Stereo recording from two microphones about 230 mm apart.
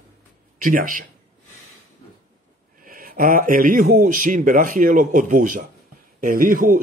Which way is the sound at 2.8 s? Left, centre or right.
Right.